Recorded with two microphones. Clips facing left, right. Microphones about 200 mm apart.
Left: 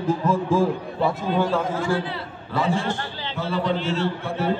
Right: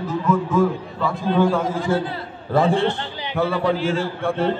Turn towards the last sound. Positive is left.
turn(degrees=-55)  # may be behind; listen again after turning